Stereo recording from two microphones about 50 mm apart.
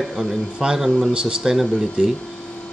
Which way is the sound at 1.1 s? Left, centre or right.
Centre.